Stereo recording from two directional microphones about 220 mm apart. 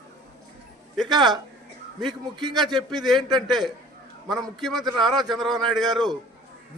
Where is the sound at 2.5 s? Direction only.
Centre (ahead or behind).